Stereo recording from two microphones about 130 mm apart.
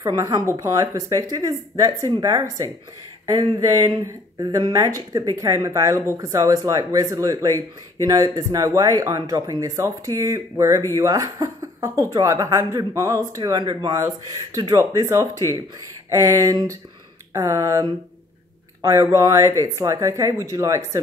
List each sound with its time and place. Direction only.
0.0 s a woman's voice: 30° right (ahead or behind)